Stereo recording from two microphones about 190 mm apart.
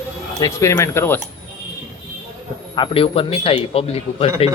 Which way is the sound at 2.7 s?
25° left (ahead or behind).